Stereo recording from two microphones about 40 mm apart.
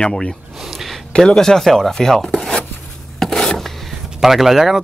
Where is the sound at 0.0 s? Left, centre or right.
Centre.